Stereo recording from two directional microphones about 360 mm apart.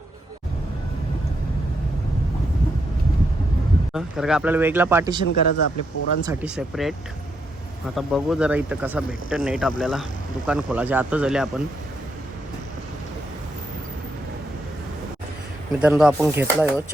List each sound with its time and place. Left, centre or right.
3.9 s speech: centre
5.2 s a man's voice: left
6.2 s speech: centre
7.9 s speech: centre
15.8 s speech: centre